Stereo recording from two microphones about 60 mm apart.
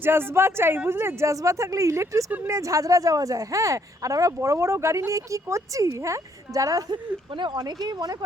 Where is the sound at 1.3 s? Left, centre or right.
Right.